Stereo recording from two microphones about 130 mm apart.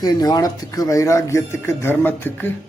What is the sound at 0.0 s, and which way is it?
Speech, 30° left (ahead or behind).